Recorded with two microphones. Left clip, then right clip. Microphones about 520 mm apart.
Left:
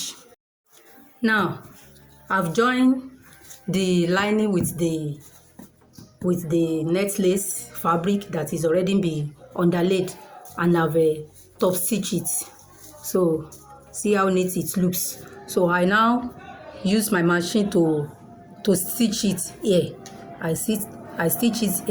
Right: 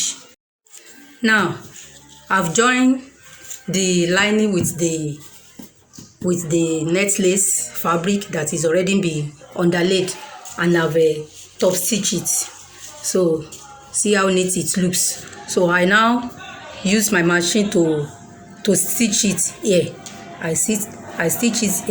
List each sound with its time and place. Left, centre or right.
1.2 s speech: left
6.2 s speech: left
13.9 s speech: left